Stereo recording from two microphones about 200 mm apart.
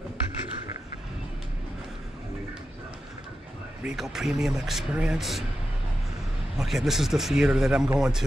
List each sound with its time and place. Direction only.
3.8 s speech: centre (ahead or behind)
6.6 s speech: centre (ahead or behind)